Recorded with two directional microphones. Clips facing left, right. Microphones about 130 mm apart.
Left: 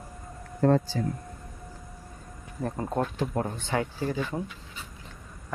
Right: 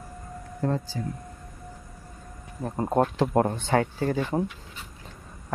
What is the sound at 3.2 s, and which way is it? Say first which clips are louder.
Speech: right 7 dB; 60° right (ahead or behind).